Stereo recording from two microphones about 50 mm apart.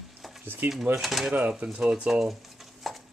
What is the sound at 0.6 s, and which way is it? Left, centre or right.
Speech, right.